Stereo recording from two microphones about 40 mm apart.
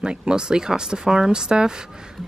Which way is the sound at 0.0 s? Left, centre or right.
Right.